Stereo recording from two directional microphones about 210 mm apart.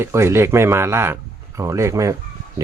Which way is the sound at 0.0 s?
15° right (ahead or behind).